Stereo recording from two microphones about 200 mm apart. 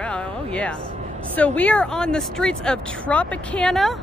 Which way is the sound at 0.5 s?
5° left (ahead or behind).